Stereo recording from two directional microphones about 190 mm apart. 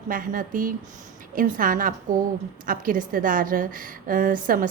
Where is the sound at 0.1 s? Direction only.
45° right (ahead or behind).